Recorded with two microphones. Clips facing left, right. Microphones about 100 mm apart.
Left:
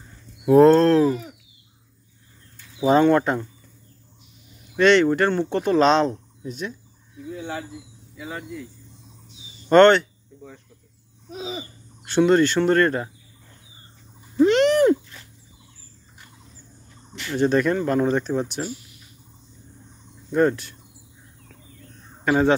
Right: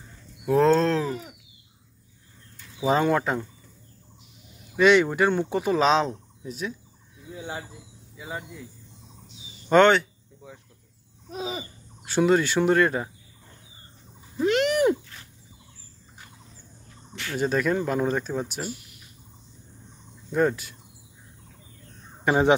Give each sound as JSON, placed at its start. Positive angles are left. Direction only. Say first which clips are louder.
{"t": 0.5, "sound": "speech", "louder": "left 6 dB", "side_deg": 5}
{"t": 2.8, "sound": "speech", "louder": "left 5 dB", "side_deg": 0}
{"t": 4.7, "sound": "speech", "louder": "left 2 dB", "side_deg": -10}
{"t": 8.2, "sound": "speech", "louder": "left 2 dB", "side_deg": -5}
{"t": 9.7, "sound": "a sound", "louder": "left 4 dB", "side_deg": -5}
{"t": 11.3, "sound": "laughter", "louder": "even", "side_deg": -50}
{"t": 12.0, "sound": "speech", "louder": "left 4 dB", "side_deg": -5}
{"t": 14.3, "sound": "a sound", "louder": "left 6 dB", "side_deg": -5}
{"t": 17.4, "sound": "speech", "louder": "left 4 dB", "side_deg": 0}
{"t": 20.2, "sound": "speech", "louder": "left 4 dB", "side_deg": 0}
{"t": 22.2, "sound": "speech", "louder": "left 1 dB", "side_deg": -15}